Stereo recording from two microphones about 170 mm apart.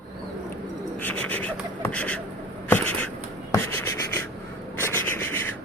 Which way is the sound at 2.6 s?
10° left (ahead or behind).